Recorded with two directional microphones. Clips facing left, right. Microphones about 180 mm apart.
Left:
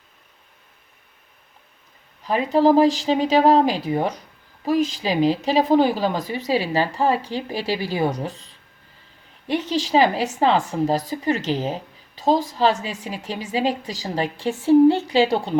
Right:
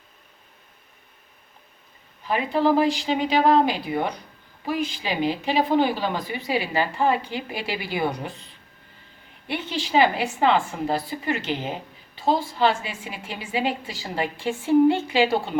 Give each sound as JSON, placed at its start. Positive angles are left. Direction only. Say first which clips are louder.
{"t": 2.2, "sound": "a woman's voice", "louder": "left 4 dB", "side_deg": 40}
{"t": 9.5, "sound": "a woman's voice", "louder": "left 5 dB", "side_deg": 40}